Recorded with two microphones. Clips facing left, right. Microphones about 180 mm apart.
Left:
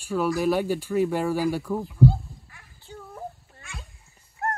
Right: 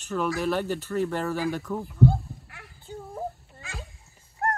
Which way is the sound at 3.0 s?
25° right (ahead or behind).